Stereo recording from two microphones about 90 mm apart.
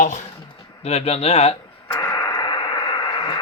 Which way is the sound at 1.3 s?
90° left.